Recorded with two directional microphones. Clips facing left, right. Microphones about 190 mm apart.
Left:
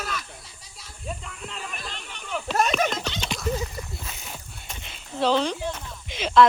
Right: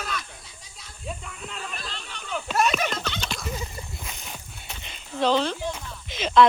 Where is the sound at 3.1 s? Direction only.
20° left (ahead or behind).